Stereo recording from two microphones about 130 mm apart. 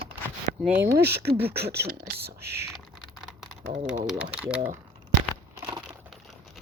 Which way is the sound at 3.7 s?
70° right (ahead or behind).